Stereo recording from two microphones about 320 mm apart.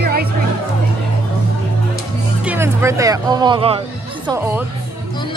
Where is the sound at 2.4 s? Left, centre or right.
Centre.